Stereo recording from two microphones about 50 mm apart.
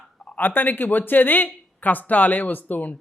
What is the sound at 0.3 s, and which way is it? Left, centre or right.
A man's voice, left.